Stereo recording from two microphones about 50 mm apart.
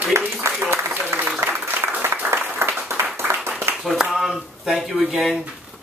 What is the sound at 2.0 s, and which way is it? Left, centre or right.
Applause, right.